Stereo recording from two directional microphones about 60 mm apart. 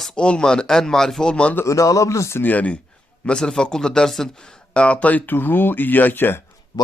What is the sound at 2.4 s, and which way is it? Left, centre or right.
Speech, left.